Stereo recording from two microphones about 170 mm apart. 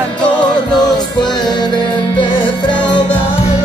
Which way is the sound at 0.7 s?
25° left (ahead or behind).